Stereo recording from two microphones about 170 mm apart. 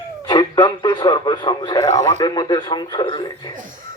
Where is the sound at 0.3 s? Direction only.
25° left (ahead or behind).